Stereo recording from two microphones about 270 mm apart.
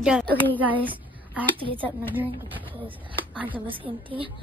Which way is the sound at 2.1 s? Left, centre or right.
Centre.